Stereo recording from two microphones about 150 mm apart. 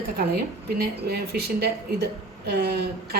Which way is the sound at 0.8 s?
90° right.